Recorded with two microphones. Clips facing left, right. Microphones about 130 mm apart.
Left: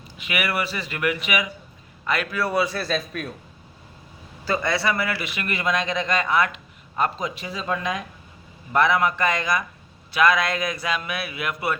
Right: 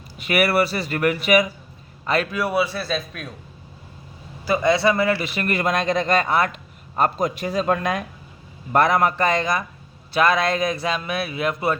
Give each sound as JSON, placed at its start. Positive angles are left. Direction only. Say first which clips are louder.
{"t": 0.2, "sound": "a man's voice", "louder": "right 7 dB", "side_deg": -40}
{"t": 2.0, "sound": "a man's voice", "louder": "right 3 dB", "side_deg": -25}
{"t": 2.5, "sound": "a man's voice", "louder": "right 1 dB", "side_deg": -5}
{"t": 4.4, "sound": "a man's voice", "louder": "right 5 dB", "side_deg": -15}